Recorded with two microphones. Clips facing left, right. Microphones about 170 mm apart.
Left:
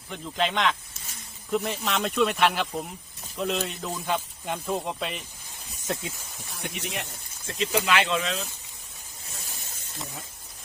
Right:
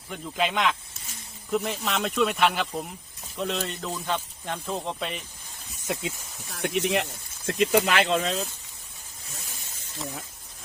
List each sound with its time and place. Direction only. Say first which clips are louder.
0.1 s speech: even; 5° right (ahead or behind)
5.9 s speech: right 1 dB; 20° right (ahead or behind)
6.6 s speech: right 9 dB; 75° right (ahead or behind); by 8.4 s 40° right (ahead or behind)